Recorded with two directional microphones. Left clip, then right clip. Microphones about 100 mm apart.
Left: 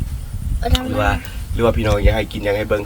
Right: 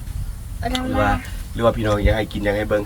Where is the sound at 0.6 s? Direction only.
30° left (ahead or behind).